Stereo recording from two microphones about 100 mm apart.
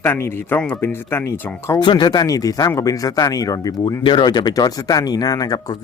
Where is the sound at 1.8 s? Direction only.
50° left (ahead or behind).